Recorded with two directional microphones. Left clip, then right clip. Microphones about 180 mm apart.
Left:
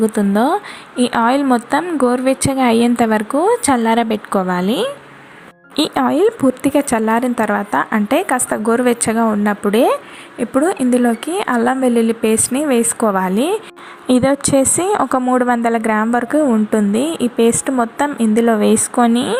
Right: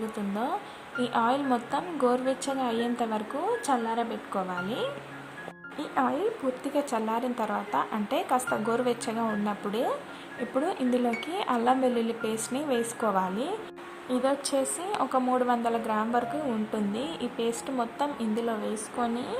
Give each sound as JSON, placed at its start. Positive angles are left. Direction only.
{"t": 0.3, "sound": "a woman's voice", "side_deg": 25}
{"t": 5.9, "sound": "speech", "side_deg": 35}
{"t": 6.6, "sound": "a woman's voice", "side_deg": 20}
{"t": 14.1, "sound": "a woman's voice", "side_deg": 30}